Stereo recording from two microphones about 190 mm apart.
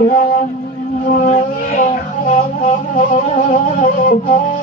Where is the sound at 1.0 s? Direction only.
45° left (ahead or behind).